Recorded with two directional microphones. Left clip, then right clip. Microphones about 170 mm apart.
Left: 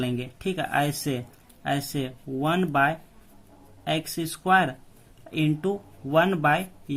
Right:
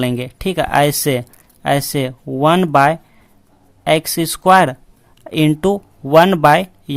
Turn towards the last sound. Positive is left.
turn(degrees=-55)  # may be behind; listen again after turning